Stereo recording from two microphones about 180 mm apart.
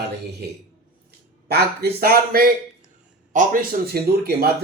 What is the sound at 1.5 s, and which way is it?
A man's voice, 60° right (ahead or behind).